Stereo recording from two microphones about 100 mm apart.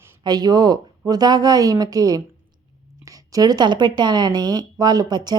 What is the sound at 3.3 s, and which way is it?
Speech, 40° right (ahead or behind).